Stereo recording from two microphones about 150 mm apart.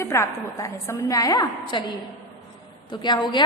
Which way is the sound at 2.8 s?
30° left (ahead or behind).